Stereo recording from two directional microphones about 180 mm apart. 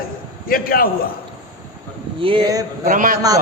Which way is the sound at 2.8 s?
45° right (ahead or behind).